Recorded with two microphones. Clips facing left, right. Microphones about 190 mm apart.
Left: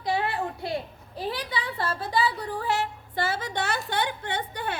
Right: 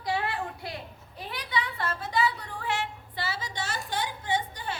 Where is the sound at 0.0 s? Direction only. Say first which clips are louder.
Left 3 dB; 25° left (ahead or behind).